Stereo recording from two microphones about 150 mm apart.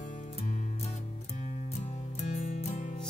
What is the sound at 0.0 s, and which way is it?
Music, 50° left (ahead or behind).